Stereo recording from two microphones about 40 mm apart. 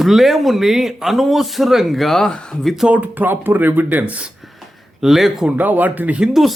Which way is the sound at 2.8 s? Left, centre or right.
Right.